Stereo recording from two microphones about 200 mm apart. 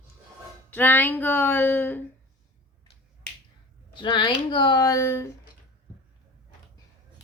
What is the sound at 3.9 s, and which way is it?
Speech, 25° left (ahead or behind).